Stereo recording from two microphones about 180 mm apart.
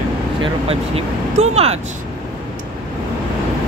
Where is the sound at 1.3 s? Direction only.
35° right (ahead or behind).